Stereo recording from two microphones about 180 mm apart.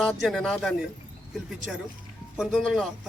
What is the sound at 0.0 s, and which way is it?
Speech, 5° left (ahead or behind).